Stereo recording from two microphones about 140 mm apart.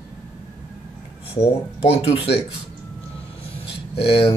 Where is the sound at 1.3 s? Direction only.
45° left (ahead or behind).